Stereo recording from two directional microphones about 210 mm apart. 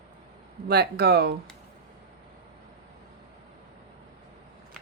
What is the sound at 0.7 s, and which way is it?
Speech, 50° right (ahead or behind).